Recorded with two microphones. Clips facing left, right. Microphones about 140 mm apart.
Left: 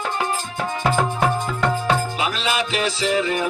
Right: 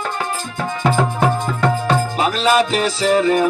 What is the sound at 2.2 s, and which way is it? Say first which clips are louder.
Music: right 7 dB; 40° right (ahead or behind).